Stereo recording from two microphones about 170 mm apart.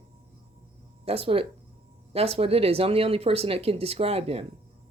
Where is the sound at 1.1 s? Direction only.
35° right (ahead or behind).